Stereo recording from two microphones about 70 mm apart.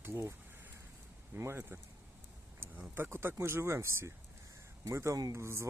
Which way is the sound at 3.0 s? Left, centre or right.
Right.